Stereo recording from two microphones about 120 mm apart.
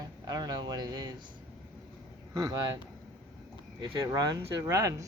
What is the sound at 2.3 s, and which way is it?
Speech, 30° right (ahead or behind).